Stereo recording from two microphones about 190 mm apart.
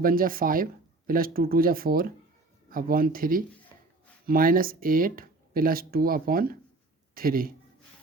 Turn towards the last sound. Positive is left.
turn(degrees=-50)  # may be behind; listen again after turning